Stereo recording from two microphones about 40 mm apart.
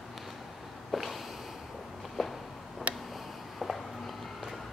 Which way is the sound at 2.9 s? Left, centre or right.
Right.